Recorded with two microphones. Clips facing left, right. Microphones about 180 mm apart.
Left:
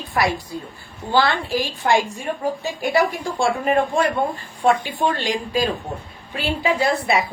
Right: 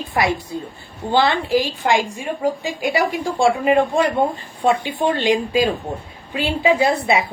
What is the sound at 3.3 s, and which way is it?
A woman's voice, 15° right (ahead or behind).